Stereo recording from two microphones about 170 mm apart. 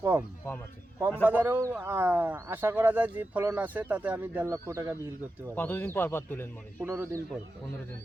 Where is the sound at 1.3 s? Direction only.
10° right (ahead or behind).